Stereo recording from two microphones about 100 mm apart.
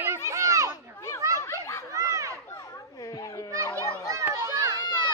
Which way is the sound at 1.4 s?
30° left (ahead or behind).